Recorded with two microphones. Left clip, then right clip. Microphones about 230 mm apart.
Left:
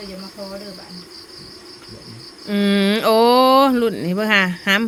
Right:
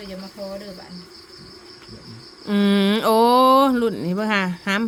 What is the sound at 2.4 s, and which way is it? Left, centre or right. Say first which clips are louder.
Speech: left 1 dB; centre.